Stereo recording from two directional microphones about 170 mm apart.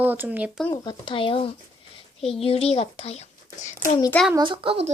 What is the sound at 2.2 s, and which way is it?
Speech, centre (ahead or behind).